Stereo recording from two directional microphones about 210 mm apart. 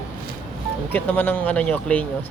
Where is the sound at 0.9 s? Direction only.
10° left (ahead or behind).